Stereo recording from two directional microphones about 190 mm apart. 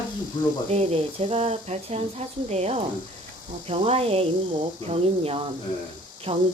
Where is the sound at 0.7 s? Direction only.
30° right (ahead or behind).